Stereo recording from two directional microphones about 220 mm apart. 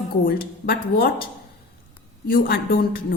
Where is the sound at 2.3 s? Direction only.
40° left (ahead or behind).